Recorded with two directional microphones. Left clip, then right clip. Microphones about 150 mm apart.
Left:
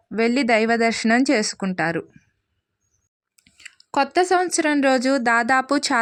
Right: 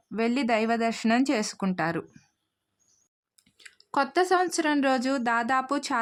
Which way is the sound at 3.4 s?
25° left (ahead or behind).